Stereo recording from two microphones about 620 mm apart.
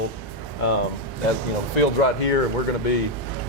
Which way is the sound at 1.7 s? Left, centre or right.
Left.